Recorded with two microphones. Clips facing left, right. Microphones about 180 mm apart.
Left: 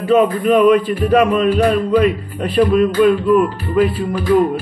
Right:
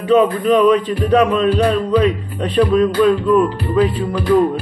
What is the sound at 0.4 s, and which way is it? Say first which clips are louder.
Speech: left 1 dB; 10° left (ahead or behind).